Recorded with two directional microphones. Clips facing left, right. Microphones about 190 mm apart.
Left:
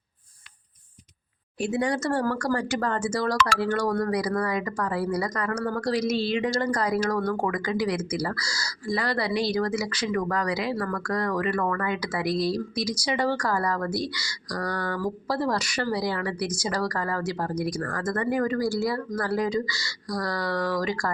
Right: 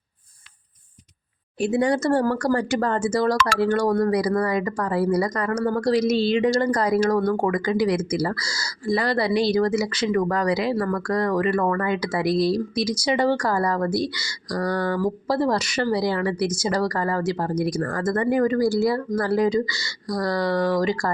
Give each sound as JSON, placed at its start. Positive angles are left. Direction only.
{"t": 1.5, "sound": "speech", "side_deg": -30}